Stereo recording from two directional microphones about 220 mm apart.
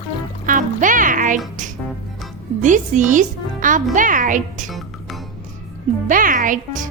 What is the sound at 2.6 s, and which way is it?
Speech, 35° right (ahead or behind).